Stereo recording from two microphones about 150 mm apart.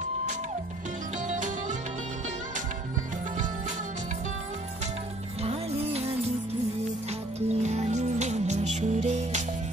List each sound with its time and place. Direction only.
1.2 s music: 55° right (ahead or behind)
5.4 s music: 45° right (ahead or behind)
7.3 s music: 45° right (ahead or behind)